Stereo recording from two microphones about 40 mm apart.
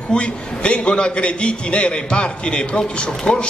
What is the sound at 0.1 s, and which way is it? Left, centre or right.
A man's voice, left.